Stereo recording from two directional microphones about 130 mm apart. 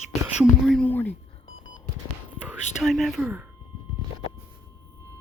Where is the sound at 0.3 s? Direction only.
5° left (ahead or behind).